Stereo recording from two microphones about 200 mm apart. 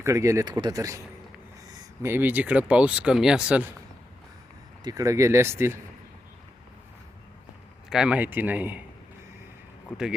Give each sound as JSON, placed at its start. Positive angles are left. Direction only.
{"t": 0.0, "sound": "speech", "side_deg": -15}
{"t": 4.8, "sound": "speech", "side_deg": -20}
{"t": 7.9, "sound": "speech", "side_deg": -5}
{"t": 9.9, "sound": "speech", "side_deg": 0}